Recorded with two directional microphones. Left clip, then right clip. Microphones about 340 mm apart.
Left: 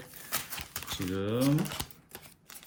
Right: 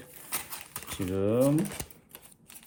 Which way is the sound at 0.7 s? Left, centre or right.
Centre.